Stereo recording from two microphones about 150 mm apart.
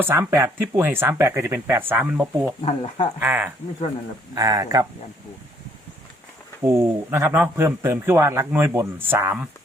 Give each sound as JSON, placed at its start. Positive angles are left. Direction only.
{"t": 0.0, "sound": "a man's voice", "side_deg": -15}
{"t": 2.6, "sound": "speech", "side_deg": 45}
{"t": 3.2, "sound": "a man's voice", "side_deg": -15}
{"t": 4.4, "sound": "speech", "side_deg": -25}
{"t": 6.7, "sound": "a man's voice", "side_deg": -15}